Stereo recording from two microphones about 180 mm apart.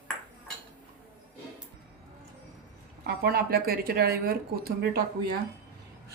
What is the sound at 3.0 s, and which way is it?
Speech, 60° right (ahead or behind).